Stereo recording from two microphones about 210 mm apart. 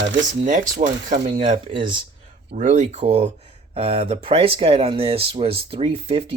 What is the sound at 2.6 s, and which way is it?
Speech, 35° right (ahead or behind).